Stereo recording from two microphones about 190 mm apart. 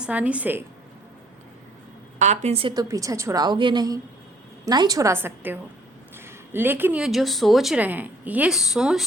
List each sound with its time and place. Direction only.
0.0 s a woman's voice: 5° right (ahead or behind)
2.1 s a woman's voice: 40° right (ahead or behind); by 9.0 s centre (ahead or behind)